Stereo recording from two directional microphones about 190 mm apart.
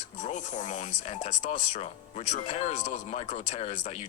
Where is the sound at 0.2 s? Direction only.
40° left (ahead or behind).